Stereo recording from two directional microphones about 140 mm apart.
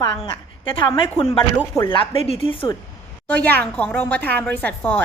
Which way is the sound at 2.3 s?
40° left (ahead or behind).